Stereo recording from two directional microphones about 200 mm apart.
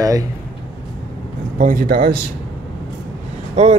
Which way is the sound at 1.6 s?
45° right (ahead or behind).